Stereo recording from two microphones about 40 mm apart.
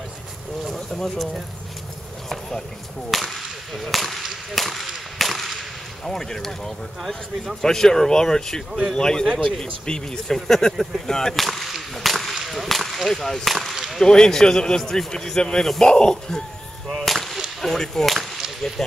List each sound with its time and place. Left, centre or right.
0.7 s speech: centre
3.1 s whip: centre
6.0 s a man's voice: centre
7.0 s speech: centre
7.6 s a man's voice: centre
11.3 s whip: centre
13.9 s a man's voice: centre
15.9 s speech: centre
16.9 s a sound: centre
17.6 s whip: centre
18.8 s speech: centre